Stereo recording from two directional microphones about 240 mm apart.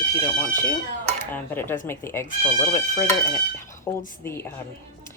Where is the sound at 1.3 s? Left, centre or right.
Centre.